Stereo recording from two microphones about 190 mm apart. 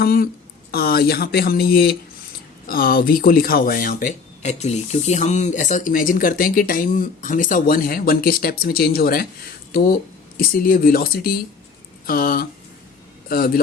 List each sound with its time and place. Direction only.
0.0 s speech: 50° left (ahead or behind)
4.4 s speech: 35° left (ahead or behind); by 13.6 s 50° left (ahead or behind)